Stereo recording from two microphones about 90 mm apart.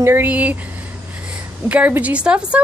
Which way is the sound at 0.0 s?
25° right (ahead or behind).